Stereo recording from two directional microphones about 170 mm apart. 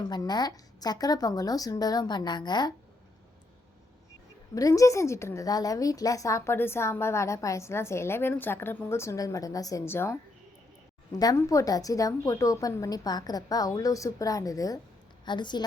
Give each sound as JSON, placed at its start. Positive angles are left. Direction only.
{"t": 0.0, "sound": "a woman's voice", "side_deg": 25}
{"t": 4.5, "sound": "a woman's voice", "side_deg": 20}
{"t": 11.2, "sound": "a woman's voice", "side_deg": 20}